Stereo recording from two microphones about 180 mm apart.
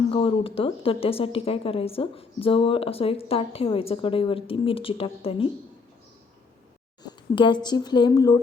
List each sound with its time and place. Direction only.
0.1 s a woman's voice: 30° left (ahead or behind)
7.0 s speech: 25° left (ahead or behind)